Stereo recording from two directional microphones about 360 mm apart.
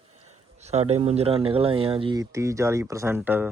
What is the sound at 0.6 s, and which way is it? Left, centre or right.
Speech, centre.